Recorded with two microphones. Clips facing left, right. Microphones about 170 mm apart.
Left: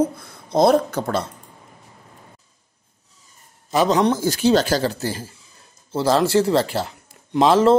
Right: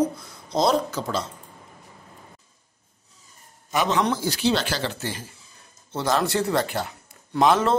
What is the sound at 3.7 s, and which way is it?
A man's voice, 35° left (ahead or behind).